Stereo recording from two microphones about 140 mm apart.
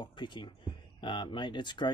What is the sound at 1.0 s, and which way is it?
Speech, 35° left (ahead or behind).